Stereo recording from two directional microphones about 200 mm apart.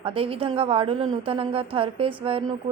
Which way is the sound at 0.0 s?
25° right (ahead or behind).